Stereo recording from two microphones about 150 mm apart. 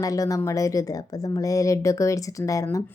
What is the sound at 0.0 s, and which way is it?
Speech, 25° left (ahead or behind).